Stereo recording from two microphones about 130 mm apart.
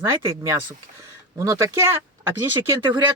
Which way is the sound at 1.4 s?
25° right (ahead or behind).